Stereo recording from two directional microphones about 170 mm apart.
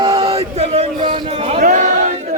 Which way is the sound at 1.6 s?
50° right (ahead or behind).